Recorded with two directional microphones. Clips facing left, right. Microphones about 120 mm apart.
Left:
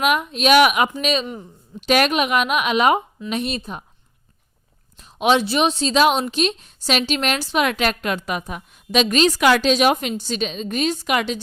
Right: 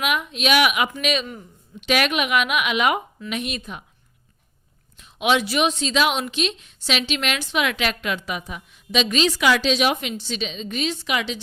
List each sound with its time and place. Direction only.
0.0 s a woman's voice: 40° left (ahead or behind)
4.9 s a woman's voice: 40° left (ahead or behind)